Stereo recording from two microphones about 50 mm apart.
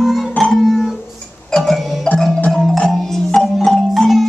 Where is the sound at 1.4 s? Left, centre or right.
Centre.